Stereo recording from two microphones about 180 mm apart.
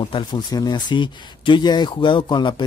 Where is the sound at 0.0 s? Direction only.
25° left (ahead or behind).